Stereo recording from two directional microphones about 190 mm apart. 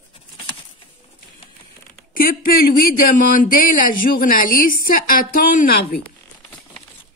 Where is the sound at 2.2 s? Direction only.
50° left (ahead or behind).